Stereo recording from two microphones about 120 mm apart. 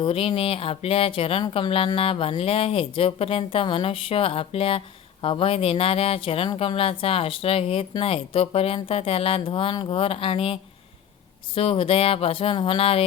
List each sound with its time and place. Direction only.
0.0 s speech: 50° left (ahead or behind)